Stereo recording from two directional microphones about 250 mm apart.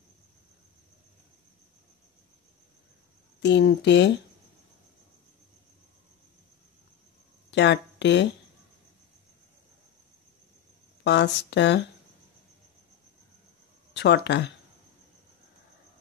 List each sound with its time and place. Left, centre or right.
3.4 s speech: left
7.5 s speech: left
11.1 s speech: left
13.9 s speech: left